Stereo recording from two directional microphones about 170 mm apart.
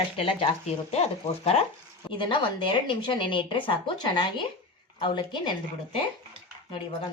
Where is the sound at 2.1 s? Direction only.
30° left (ahead or behind).